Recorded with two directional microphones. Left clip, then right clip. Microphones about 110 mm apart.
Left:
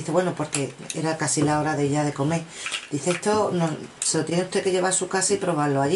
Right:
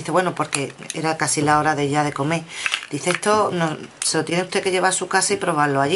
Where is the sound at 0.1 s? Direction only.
15° right (ahead or behind).